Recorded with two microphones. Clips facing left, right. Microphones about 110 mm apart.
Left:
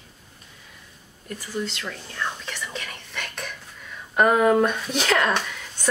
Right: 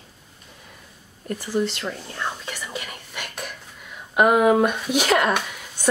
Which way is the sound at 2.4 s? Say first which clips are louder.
Right 1 dB; 10° right (ahead or behind).